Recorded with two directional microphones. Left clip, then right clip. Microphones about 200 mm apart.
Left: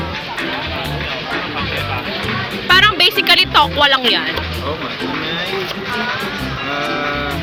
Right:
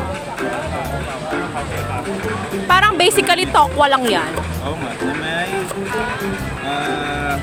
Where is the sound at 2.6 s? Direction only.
25° right (ahead or behind).